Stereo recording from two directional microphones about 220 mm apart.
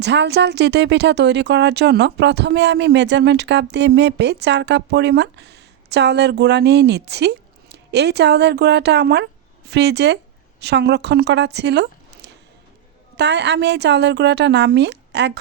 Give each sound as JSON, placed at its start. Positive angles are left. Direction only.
{"t": 0.0, "sound": "speech", "side_deg": -50}